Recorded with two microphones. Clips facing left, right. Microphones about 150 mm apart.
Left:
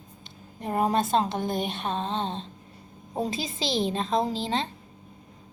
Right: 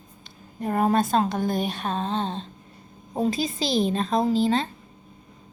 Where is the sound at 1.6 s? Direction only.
45° right (ahead or behind).